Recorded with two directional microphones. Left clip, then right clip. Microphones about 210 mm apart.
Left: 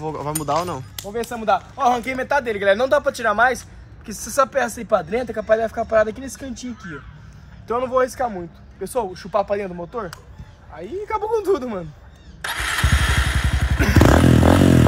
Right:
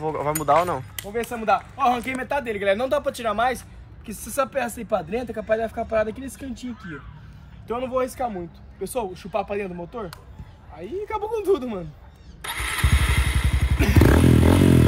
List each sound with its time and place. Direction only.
0.0 s speech: 10° left (ahead or behind)
2.1 s a man's voice: 5° left (ahead or behind)
12.4 s motorcycle: centre (ahead or behind)
14.2 s a sound: centre (ahead or behind)